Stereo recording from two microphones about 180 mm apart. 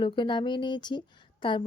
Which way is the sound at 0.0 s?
25° left (ahead or behind).